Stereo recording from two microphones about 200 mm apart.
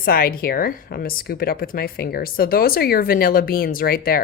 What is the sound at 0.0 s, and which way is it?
Speech, 50° left (ahead or behind).